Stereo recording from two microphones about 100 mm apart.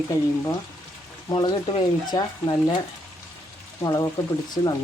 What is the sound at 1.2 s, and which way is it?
Speech, 45° left (ahead or behind).